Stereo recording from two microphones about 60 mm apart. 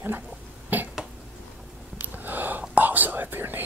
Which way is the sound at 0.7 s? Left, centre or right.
Right.